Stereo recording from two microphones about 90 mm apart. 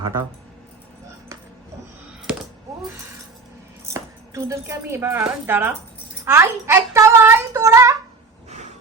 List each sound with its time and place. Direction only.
3.9 s a child's voice: 35° right (ahead or behind)